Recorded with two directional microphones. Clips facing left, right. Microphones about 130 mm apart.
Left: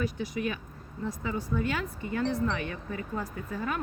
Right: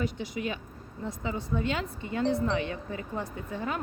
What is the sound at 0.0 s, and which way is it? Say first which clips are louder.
Speech: left 1 dB; 25° right (ahead or behind).